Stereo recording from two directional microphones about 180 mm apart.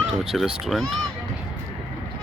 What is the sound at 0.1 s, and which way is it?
Speech, 5° right (ahead or behind).